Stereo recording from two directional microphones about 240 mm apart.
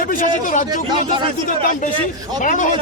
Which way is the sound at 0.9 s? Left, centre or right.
Centre.